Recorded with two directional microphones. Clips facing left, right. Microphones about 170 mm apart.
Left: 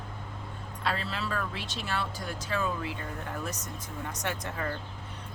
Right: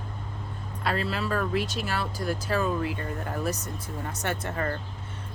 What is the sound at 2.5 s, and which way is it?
Speech, 45° right (ahead or behind).